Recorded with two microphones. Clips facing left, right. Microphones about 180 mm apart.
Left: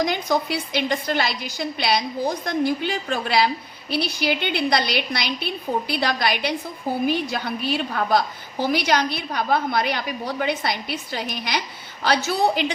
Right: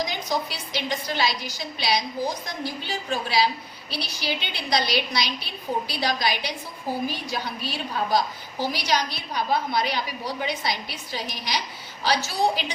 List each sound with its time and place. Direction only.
0.0 s a woman's voice: 55° left (ahead or behind)